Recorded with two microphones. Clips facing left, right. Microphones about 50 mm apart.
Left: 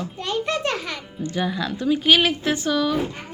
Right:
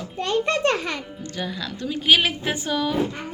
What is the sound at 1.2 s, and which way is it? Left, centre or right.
Speech, centre.